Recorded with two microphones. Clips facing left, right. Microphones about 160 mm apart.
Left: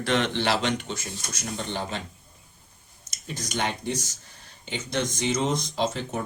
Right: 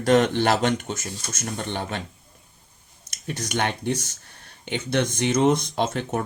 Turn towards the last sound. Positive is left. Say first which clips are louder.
# right 3 dB
turn(degrees=-60)  # may be behind; listen again after turning